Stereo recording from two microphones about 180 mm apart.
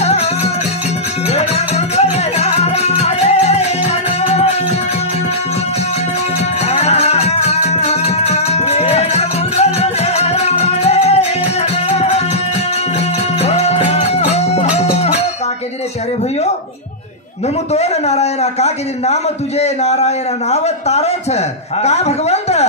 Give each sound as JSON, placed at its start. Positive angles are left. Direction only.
{"t": 0.0, "sound": "music", "side_deg": 35}
{"t": 6.6, "sound": "music", "side_deg": 35}
{"t": 13.4, "sound": "music", "side_deg": 35}
{"t": 17.7, "sound": "a man's voice", "side_deg": 35}